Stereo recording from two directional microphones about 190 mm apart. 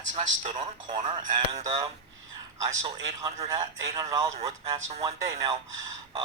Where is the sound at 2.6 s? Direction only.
20° right (ahead or behind).